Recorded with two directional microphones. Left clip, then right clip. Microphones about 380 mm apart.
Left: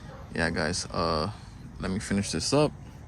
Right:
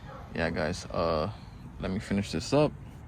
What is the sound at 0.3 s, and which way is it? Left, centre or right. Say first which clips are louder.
Speech: left 2 dB; centre.